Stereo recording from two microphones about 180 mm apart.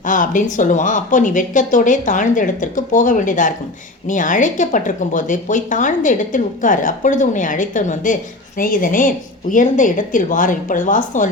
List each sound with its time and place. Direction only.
0.0 s speech: 45° left (ahead or behind)